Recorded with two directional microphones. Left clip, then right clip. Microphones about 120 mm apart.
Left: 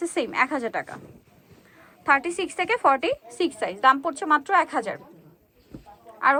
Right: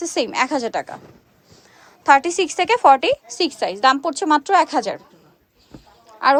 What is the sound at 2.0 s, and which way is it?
A woman's voice, 40° right (ahead or behind).